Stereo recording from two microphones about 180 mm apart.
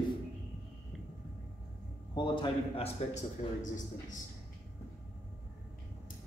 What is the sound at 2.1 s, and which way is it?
A man's voice, 25° left (ahead or behind).